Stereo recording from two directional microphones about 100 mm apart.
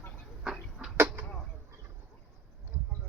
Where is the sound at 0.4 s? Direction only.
5° right (ahead or behind).